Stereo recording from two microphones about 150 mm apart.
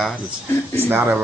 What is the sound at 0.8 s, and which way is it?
Speech, 15° right (ahead or behind).